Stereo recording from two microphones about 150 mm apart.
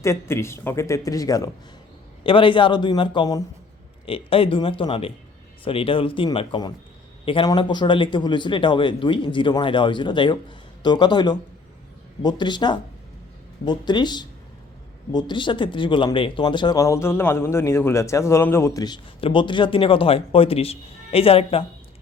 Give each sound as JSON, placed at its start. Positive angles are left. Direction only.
{"t": 0.0, "sound": "speech", "side_deg": 20}
{"t": 2.2, "sound": "a man's voice", "side_deg": 35}
{"t": 4.0, "sound": "a man's voice", "side_deg": 40}